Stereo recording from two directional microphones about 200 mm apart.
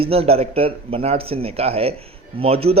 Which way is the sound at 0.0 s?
30° right (ahead or behind).